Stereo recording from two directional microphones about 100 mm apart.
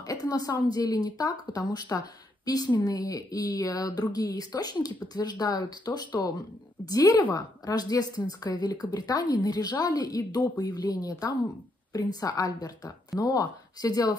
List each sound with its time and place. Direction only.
0.0 s a woman's voice: 40° left (ahead or behind)